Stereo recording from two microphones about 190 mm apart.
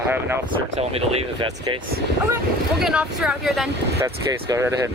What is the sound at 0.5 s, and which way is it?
Speech, 30° right (ahead or behind).